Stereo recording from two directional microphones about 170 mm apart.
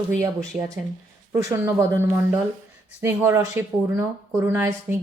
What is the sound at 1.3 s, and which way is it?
Speech, 15° right (ahead or behind).